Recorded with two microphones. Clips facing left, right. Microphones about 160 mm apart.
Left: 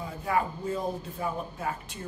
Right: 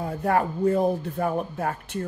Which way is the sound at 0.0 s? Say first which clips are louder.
Right 5 dB; 60° right (ahead or behind).